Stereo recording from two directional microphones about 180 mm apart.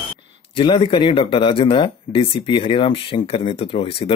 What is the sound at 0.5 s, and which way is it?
Speech, 30° left (ahead or behind).